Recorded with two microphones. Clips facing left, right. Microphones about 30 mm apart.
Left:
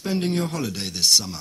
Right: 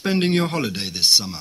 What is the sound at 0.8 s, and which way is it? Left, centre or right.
Speech, right.